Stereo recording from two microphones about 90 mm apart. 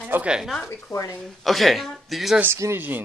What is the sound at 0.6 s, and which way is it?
Speech, 35° left (ahead or behind).